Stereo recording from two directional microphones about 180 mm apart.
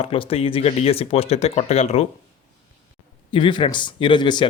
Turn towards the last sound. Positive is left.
turn(degrees=25)  # may be behind; listen again after turning